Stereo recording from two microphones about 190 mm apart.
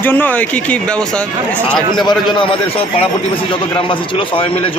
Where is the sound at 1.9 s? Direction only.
25° left (ahead or behind).